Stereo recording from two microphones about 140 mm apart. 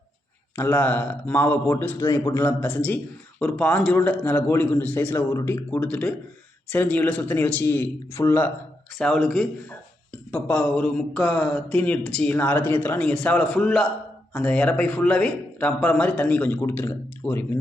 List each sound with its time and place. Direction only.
0.5 s speech: 15° left (ahead or behind)
9.0 s a man's voice: 5° left (ahead or behind)